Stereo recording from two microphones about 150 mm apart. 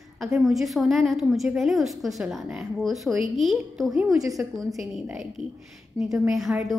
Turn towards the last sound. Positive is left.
turn(degrees=0)  # may be behind; listen again after turning